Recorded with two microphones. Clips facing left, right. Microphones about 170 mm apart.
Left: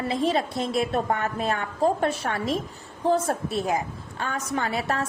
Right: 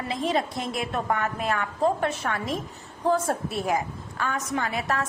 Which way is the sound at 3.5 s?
25° left (ahead or behind).